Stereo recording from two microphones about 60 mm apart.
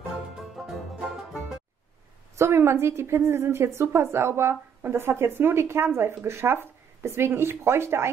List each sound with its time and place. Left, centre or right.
2.3 s speech: right